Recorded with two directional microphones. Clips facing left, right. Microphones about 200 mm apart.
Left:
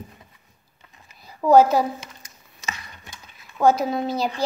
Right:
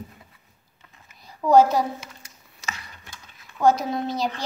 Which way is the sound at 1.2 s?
5° left (ahead or behind).